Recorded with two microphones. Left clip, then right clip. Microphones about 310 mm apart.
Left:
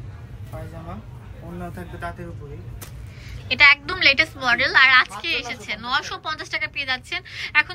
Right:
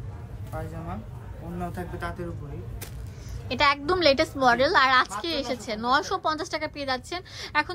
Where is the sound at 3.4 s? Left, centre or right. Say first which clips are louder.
Left 8 dB; centre.